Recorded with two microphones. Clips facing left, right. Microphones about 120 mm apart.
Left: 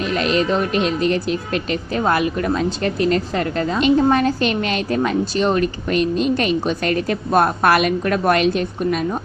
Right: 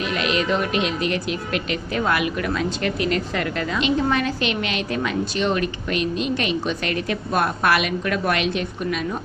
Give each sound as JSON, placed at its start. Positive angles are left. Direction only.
{"t": 0.0, "sound": "speech", "side_deg": 40}